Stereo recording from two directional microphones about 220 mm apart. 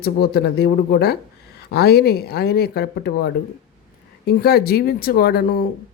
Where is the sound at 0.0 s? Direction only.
45° left (ahead or behind).